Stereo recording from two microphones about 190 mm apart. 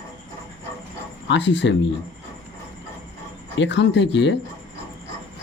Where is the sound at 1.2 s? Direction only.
70° left (ahead or behind).